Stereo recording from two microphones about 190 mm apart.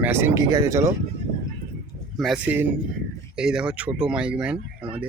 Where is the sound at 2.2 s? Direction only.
5° right (ahead or behind).